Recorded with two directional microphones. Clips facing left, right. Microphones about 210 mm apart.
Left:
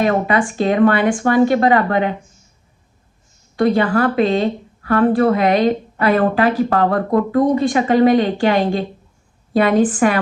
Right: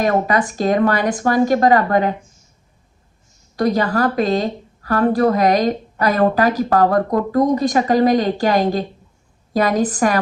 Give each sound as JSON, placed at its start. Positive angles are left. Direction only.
{"t": 0.0, "sound": "a woman's voice", "side_deg": -40}
{"t": 3.5, "sound": "a woman's voice", "side_deg": -40}